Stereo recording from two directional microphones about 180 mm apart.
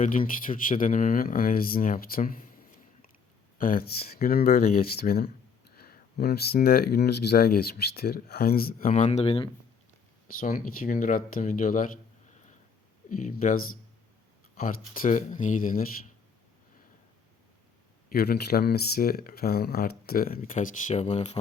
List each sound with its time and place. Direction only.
0.0 s speech: 50° left (ahead or behind)
3.6 s speech: 55° left (ahead or behind); by 9.5 s 35° left (ahead or behind)
10.4 s speech: 50° left (ahead or behind)
13.1 s speech: 50° left (ahead or behind)
14.6 s speech: 50° left (ahead or behind)
18.1 s speech: 60° left (ahead or behind); by 21.3 s 40° left (ahead or behind)